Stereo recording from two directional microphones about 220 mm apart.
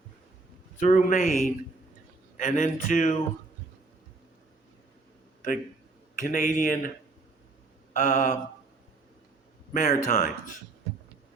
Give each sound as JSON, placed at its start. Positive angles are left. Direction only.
{"t": 0.8, "sound": "speech", "side_deg": 35}
{"t": 6.1, "sound": "speech", "side_deg": 35}
{"t": 7.9, "sound": "speech", "side_deg": 35}
{"t": 9.7, "sound": "speech", "side_deg": 30}